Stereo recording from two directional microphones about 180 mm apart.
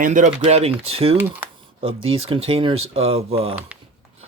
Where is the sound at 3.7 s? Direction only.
10° right (ahead or behind).